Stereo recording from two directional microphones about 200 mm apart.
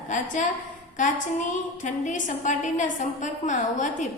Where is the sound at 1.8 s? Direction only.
40° left (ahead or behind).